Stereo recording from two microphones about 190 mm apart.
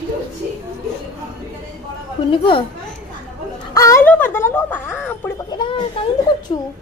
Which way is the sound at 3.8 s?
15° left (ahead or behind).